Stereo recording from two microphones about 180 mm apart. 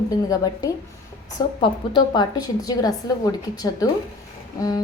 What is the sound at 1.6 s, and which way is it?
Speech, 25° left (ahead or behind).